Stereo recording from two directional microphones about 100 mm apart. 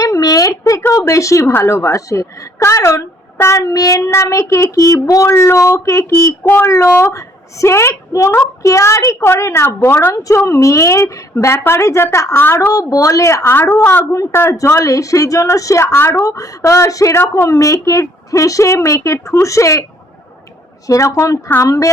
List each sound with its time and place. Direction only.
0.0 s a woman's voice: 35° left (ahead or behind)
5.3 s a woman's voice: 25° left (ahead or behind)
12.7 s a woman's voice: 35° left (ahead or behind)
20.8 s a woman's voice: 35° left (ahead or behind)